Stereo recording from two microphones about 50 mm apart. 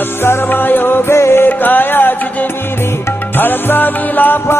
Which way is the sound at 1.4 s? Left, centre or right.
Left.